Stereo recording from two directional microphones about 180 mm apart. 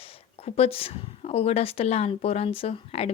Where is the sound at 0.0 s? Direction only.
35° left (ahead or behind).